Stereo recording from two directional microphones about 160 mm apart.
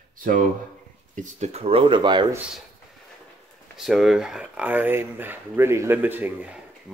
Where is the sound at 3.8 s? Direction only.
Centre (ahead or behind).